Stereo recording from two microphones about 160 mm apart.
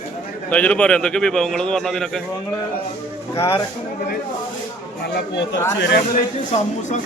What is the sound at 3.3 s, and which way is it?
Speech, 15° left (ahead or behind).